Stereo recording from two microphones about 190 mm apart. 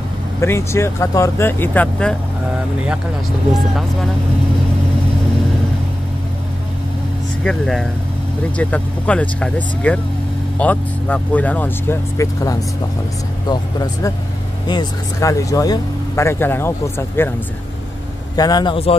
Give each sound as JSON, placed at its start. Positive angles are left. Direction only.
{"t": 0.4, "sound": "speech", "side_deg": 15}
{"t": 3.5, "sound": "speech", "side_deg": 0}
{"t": 7.4, "sound": "speech", "side_deg": 0}
{"t": 18.3, "sound": "speech", "side_deg": 20}